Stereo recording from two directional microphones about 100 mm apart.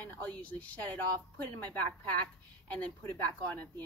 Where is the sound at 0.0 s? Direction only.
15° left (ahead or behind).